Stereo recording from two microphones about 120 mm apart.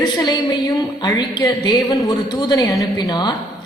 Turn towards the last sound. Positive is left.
turn(degrees=35)  # may be behind; listen again after turning